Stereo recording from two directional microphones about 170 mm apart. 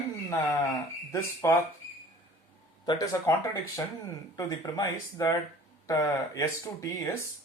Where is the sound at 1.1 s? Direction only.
15° left (ahead or behind).